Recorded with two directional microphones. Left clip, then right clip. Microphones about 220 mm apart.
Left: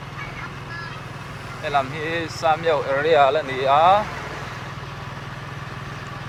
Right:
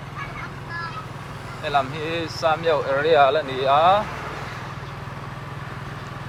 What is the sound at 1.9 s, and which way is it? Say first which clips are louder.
Speech: left 1 dB; 10° right (ahead or behind).